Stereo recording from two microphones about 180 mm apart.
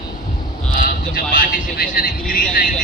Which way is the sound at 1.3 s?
50° left (ahead or behind).